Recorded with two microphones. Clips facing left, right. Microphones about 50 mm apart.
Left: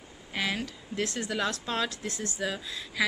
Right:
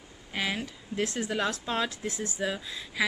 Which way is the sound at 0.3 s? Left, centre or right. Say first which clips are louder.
Even; centre.